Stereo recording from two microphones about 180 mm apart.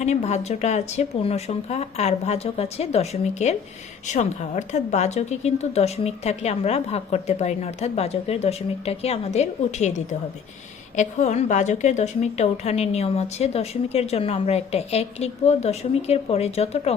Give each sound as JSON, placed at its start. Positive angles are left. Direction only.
{"t": 0.0, "sound": "a woman's voice", "side_deg": 40}